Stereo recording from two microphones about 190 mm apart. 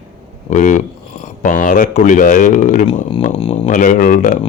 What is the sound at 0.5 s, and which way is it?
Speech, 40° left (ahead or behind).